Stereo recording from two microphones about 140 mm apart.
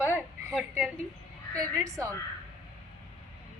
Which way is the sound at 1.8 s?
25° right (ahead or behind).